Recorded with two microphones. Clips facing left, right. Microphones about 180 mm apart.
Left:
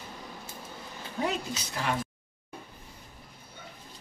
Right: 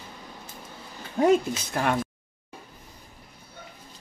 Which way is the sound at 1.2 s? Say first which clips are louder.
Right 11 dB; 50° right (ahead or behind).